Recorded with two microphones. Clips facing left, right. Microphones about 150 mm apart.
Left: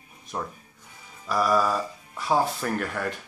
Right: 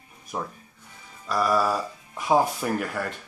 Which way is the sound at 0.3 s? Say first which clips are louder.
Right 1 dB; 5° right (ahead or behind).